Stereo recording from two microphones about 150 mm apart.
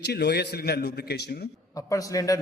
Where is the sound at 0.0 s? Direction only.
90° left.